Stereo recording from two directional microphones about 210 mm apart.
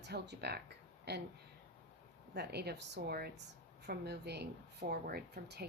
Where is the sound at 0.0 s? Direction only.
50° right (ahead or behind).